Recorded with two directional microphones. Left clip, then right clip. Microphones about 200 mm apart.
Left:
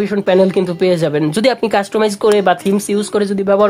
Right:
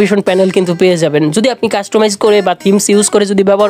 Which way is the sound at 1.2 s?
15° right (ahead or behind).